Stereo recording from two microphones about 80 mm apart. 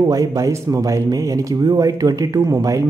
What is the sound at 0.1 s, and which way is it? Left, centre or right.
A man's voice, right.